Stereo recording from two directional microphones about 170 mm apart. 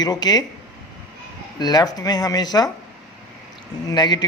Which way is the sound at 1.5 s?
25° left (ahead or behind).